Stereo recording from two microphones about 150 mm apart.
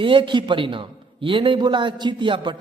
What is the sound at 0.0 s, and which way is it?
A man's voice, 35° right (ahead or behind).